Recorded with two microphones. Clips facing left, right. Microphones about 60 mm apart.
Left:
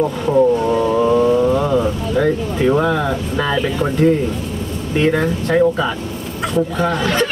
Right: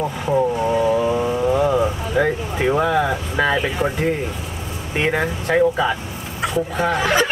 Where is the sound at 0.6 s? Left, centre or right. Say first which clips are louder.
Left 2 dB; centre.